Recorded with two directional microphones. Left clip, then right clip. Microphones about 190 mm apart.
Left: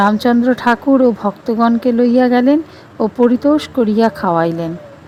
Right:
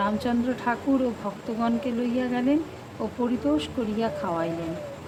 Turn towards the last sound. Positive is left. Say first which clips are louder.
# left 13 dB
turn(degrees=50)  # may be behind; listen again after turning